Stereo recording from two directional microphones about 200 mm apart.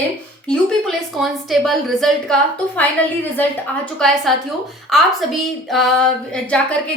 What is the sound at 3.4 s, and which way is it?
A woman's voice, 5° left (ahead or behind).